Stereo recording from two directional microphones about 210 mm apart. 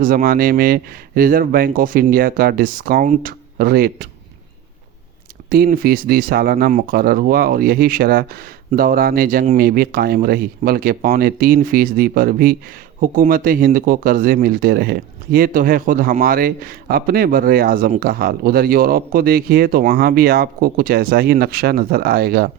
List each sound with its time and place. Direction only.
0.0 s speech: 45° right (ahead or behind)
5.6 s speech: 45° right (ahead or behind)